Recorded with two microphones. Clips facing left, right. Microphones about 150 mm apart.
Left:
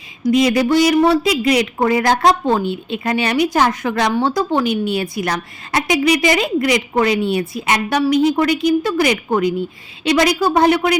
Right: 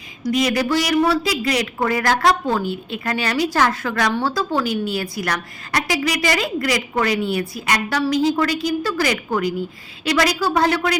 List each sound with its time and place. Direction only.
0.2 s a woman's voice: 25° left (ahead or behind)